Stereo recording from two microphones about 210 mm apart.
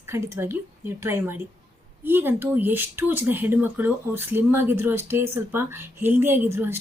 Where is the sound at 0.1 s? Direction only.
10° right (ahead or behind).